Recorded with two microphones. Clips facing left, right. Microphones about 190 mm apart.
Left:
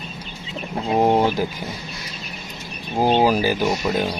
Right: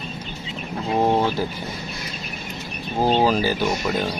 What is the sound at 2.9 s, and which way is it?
Speech, 15° left (ahead or behind).